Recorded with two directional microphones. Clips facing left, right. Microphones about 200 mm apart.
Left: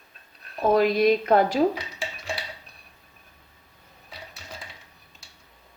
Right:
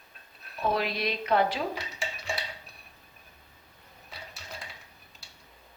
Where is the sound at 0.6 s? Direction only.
45° left (ahead or behind).